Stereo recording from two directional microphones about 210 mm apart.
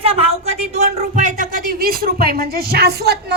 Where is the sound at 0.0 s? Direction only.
30° right (ahead or behind).